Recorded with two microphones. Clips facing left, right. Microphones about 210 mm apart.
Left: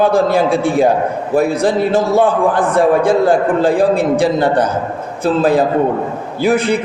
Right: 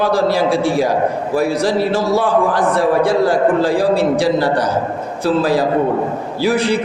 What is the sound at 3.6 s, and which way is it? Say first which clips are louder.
Speech: left 3 dB; 20° left (ahead or behind).